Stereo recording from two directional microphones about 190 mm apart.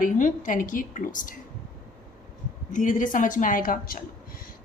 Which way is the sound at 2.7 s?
45° left (ahead or behind).